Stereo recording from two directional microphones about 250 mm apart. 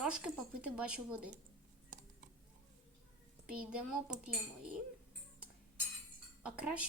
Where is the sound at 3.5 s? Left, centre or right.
Centre.